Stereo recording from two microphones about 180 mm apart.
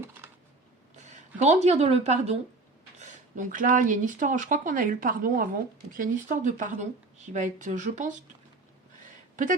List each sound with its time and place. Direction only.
1.4 s speech: 40° right (ahead or behind)
9.3 s speech: 45° right (ahead or behind)